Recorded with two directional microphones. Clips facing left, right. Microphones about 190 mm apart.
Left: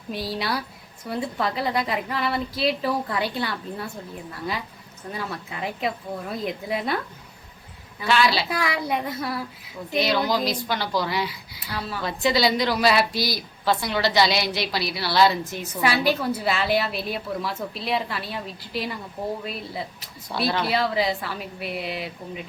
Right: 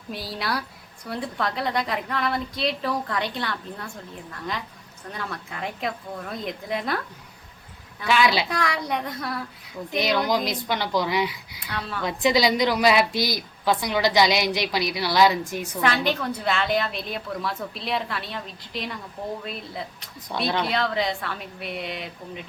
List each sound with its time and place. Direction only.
0.1 s a woman's voice: centre (ahead or behind)
8.0 s a woman's voice: 15° right (ahead or behind)
8.4 s a woman's voice: 5° left (ahead or behind)
10.2 s speech: 20° right (ahead or behind)
11.6 s a woman's voice: 5° left (ahead or behind)
12.0 s a woman's voice: 15° right (ahead or behind)
15.8 s a woman's voice: 10° left (ahead or behind)